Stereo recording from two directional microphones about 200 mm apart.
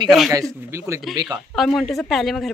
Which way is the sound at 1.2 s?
Centre (ahead or behind).